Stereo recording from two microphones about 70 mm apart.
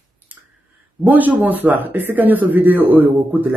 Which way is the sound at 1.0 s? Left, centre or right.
Right.